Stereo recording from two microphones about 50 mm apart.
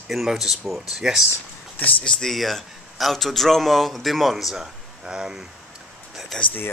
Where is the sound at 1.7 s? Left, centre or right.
Left.